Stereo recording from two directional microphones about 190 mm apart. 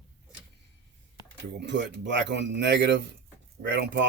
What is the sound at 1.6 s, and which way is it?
Speech, 65° right (ahead or behind).